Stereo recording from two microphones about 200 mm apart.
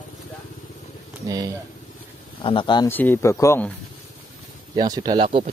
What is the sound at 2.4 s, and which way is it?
Speech, 25° left (ahead or behind).